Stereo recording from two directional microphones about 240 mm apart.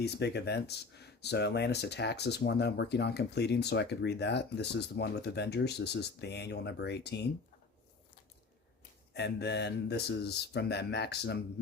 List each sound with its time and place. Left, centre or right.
0.0 s speech: left
9.1 s speech: left